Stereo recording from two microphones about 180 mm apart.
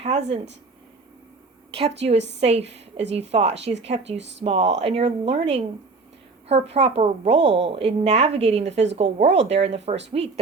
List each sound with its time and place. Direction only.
0.0 s a sound: 35° right (ahead or behind)
1.7 s a woman's voice: 35° right (ahead or behind)
4.2 s speech: 80° right
4.4 s a woman's voice: 35° right (ahead or behind)